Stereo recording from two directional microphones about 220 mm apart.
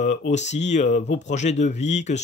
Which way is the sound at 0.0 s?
35° left (ahead or behind).